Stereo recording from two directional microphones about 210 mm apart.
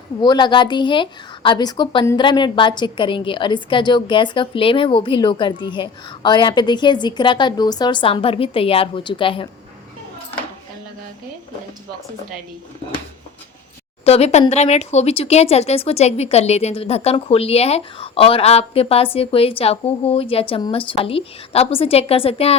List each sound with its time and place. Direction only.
0.2 s a woman's voice: 20° left (ahead or behind)
14.0 s a woman's voice: 30° left (ahead or behind)